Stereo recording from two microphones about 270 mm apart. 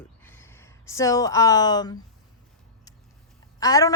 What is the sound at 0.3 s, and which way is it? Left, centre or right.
Speech, centre.